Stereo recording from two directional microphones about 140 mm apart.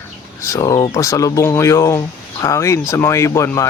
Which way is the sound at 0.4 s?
25° left (ahead or behind).